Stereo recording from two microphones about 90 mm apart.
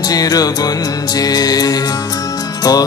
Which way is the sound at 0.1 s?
45° left (ahead or behind).